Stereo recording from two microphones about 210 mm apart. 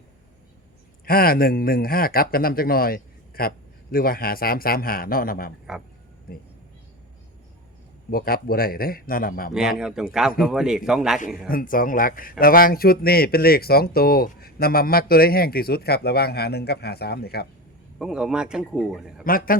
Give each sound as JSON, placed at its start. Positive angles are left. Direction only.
{"t": 1.0, "sound": "speech", "side_deg": 45}
{"t": 5.7, "sound": "a man's voice", "side_deg": 0}
{"t": 8.1, "sound": "speech", "side_deg": 45}
{"t": 9.6, "sound": "a man's voice", "side_deg": -5}
{"t": 11.4, "sound": "speech", "side_deg": 40}
{"t": 18.0, "sound": "a man's voice", "side_deg": -5}
{"t": 19.2, "sound": "speech", "side_deg": 40}